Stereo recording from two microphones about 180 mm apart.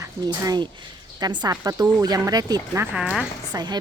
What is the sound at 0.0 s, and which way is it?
Speech, 20° right (ahead or behind).